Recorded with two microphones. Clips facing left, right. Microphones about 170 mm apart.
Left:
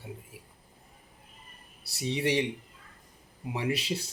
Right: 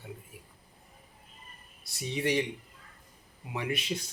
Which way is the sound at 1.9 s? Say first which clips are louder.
Left 2 dB; 30° left (ahead or behind).